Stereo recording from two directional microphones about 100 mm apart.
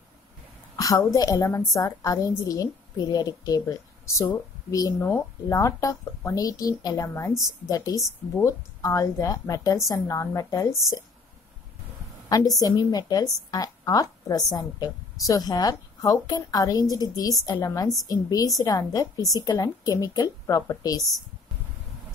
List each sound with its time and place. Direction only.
0.7 s a woman's voice: 35° left (ahead or behind)
12.5 s a woman's voice: 40° left (ahead or behind)